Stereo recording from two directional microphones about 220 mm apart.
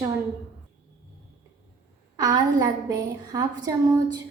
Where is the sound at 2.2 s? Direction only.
15° right (ahead or behind).